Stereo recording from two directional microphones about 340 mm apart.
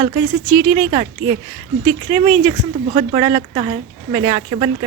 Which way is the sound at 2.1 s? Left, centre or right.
Centre.